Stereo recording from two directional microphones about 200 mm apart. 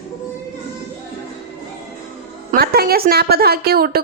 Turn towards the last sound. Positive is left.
turn(degrees=-50)  # may be behind; listen again after turning